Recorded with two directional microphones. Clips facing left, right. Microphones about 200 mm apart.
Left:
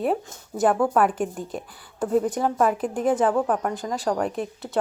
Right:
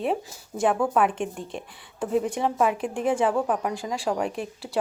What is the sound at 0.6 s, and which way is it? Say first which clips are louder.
Speech: left 2 dB; centre (ahead or behind).